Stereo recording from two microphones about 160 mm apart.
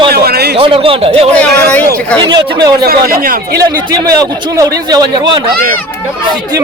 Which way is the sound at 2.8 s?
65° right (ahead or behind).